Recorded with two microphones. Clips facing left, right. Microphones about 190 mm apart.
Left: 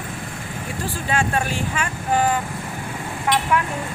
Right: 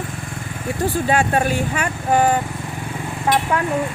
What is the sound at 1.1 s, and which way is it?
Speech, 35° right (ahead or behind).